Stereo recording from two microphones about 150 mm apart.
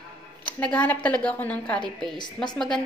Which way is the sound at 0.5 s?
10° left (ahead or behind).